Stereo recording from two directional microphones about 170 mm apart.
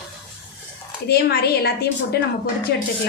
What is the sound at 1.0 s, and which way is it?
A woman's voice, 70° left (ahead or behind).